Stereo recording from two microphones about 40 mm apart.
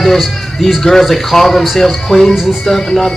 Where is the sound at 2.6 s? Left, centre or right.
Centre.